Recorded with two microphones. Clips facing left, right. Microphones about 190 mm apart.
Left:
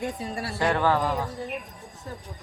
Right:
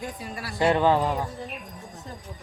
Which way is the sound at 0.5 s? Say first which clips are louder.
Right 3 dB; 15° right (ahead or behind).